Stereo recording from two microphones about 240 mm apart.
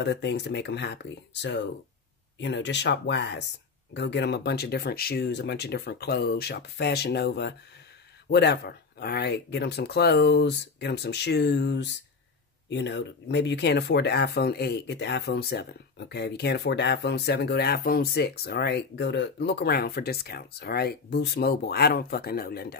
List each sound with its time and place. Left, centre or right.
0.0 s speech: left